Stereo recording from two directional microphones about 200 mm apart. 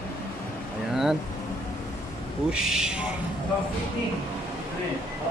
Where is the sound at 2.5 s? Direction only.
5° right (ahead or behind).